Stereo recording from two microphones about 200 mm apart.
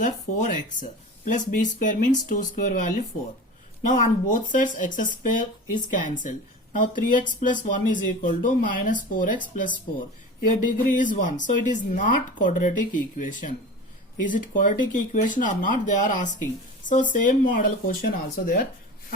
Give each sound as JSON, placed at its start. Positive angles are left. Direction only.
{"t": 0.0, "sound": "speech", "side_deg": 40}